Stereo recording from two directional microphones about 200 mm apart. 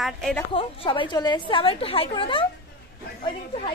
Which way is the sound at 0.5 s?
25° left (ahead or behind).